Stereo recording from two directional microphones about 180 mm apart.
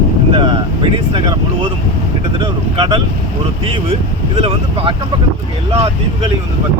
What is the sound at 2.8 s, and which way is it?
Speech, 30° right (ahead or behind).